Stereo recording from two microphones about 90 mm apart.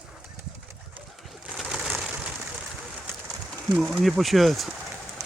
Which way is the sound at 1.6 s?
10° right (ahead or behind).